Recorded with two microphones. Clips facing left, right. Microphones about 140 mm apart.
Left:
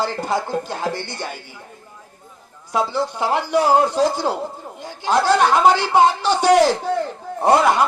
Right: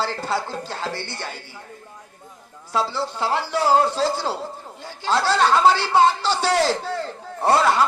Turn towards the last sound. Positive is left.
turn(degrees=15)  # may be behind; listen again after turning